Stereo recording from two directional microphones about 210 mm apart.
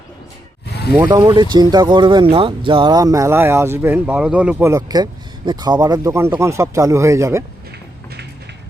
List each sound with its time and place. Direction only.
0.9 s speech: 15° right (ahead or behind)